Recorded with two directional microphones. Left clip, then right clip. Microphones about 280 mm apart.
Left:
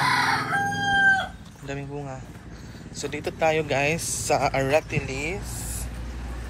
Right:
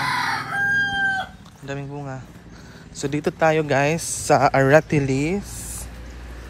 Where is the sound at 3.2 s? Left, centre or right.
Right.